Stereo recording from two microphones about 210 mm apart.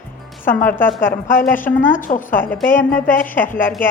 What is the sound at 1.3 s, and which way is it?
A woman's voice, 40° left (ahead or behind).